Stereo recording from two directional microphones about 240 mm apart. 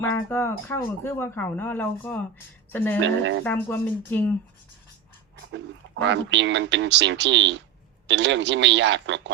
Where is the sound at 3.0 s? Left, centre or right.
Right.